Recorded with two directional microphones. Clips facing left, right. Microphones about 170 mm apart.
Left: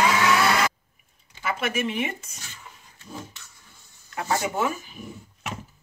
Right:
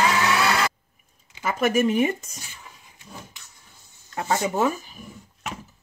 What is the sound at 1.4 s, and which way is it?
Speech, 40° right (ahead or behind).